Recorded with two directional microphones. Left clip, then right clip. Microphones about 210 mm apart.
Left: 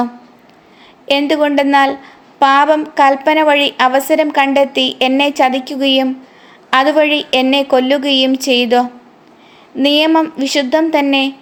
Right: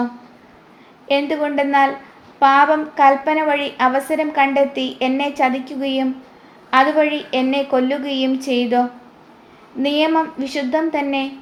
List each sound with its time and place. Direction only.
1.0 s a woman's voice: 50° left (ahead or behind)